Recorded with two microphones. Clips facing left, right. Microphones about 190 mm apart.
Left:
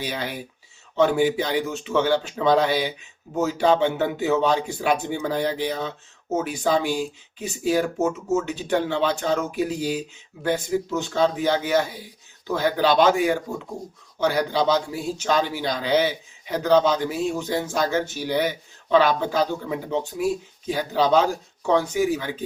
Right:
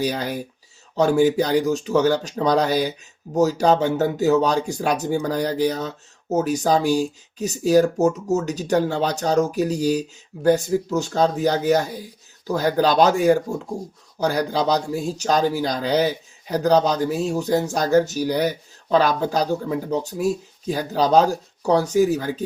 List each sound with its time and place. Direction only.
0.0 s speech: 40° right (ahead or behind)